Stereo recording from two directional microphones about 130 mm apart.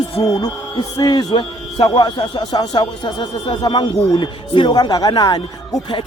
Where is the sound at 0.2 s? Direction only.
40° left (ahead or behind).